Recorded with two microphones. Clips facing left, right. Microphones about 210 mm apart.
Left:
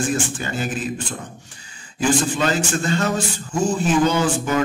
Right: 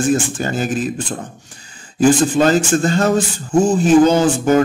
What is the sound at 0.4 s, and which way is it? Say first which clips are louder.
Speech: right 6 dB; 40° right (ahead or behind).